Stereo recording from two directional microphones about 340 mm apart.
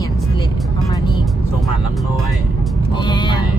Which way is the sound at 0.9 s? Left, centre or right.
Centre.